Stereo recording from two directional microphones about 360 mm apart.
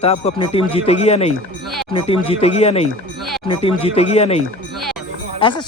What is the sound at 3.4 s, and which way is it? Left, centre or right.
Speech, centre.